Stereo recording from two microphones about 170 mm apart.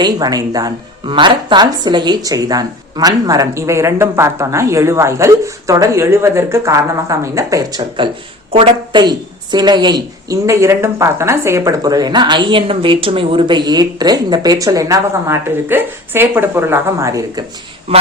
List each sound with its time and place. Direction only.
0.0 s a woman's voice: 20° right (ahead or behind)